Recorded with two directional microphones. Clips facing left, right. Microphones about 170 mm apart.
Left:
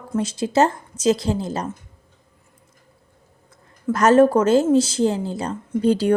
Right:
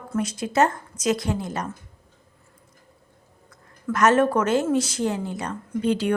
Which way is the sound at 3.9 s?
30° left (ahead or behind).